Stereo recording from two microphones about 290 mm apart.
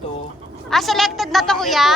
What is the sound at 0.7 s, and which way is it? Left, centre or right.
A woman's voice, centre.